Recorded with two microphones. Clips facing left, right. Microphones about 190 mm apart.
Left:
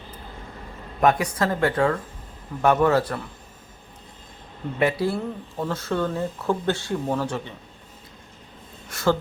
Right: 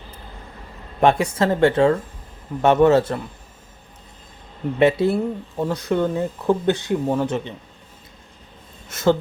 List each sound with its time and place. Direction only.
1.0 s speech: 25° right (ahead or behind)
4.8 s speech: 25° right (ahead or behind)
8.9 s speech: 20° right (ahead or behind)